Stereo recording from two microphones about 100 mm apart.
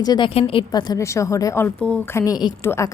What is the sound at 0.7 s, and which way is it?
Speech, 45° left (ahead or behind).